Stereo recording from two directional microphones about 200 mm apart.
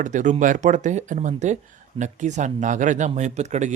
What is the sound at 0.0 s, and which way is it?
Speech, 40° right (ahead or behind).